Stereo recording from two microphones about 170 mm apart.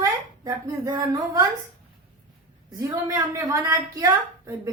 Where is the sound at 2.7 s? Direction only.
20° right (ahead or behind).